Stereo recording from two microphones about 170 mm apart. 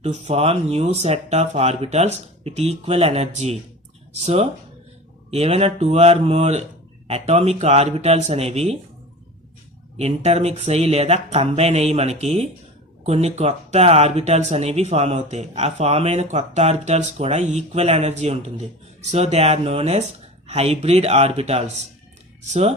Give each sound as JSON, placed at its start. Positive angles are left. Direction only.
{"t": 0.0, "sound": "speech", "side_deg": -40}
{"t": 10.0, "sound": "speech", "side_deg": -40}